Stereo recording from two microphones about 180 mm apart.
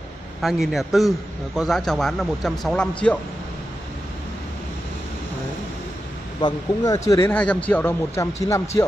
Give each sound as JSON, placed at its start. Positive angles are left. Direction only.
{"t": 0.4, "sound": "speech", "side_deg": 0}
{"t": 6.4, "sound": "speech", "side_deg": 20}